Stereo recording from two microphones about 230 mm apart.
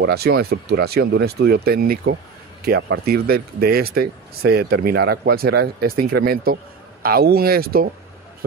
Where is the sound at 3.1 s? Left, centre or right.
Right.